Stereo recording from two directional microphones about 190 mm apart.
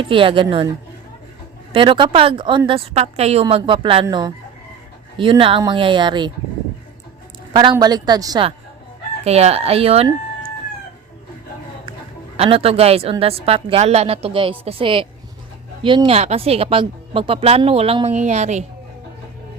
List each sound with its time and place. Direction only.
0.0 s a woman's voice: 25° right (ahead or behind)
1.7 s a woman's voice: 25° right (ahead or behind)
7.5 s a woman's voice: 25° right (ahead or behind)
9.2 s speech: 35° right (ahead or behind)
12.4 s speech: 30° right (ahead or behind)